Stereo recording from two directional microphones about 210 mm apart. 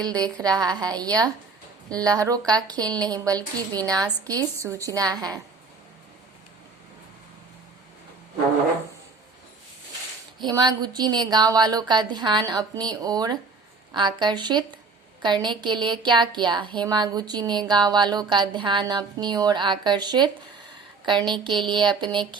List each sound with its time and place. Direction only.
0.1 s a woman's voice: 15° right (ahead or behind)
10.4 s speech: 20° right (ahead or behind)